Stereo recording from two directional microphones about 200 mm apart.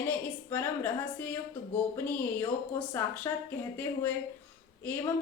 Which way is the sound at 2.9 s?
10° left (ahead or behind).